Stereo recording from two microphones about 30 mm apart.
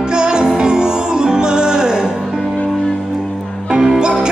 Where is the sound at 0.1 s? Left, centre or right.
Right.